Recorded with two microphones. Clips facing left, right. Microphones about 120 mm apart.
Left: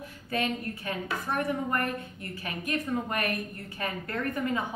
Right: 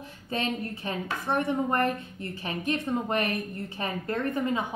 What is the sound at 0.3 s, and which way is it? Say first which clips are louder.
A woman's voice: even; 25° right (ahead or behind).